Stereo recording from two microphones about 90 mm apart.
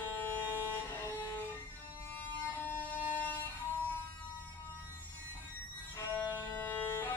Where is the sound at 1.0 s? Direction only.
25° left (ahead or behind).